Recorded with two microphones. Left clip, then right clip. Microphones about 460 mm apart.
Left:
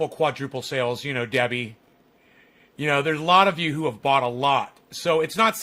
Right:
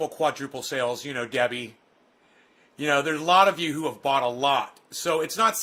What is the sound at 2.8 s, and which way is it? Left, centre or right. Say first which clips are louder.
A man's voice: left 1 dB; centre.